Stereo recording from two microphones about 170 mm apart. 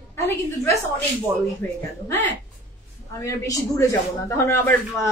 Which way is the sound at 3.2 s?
15° left (ahead or behind).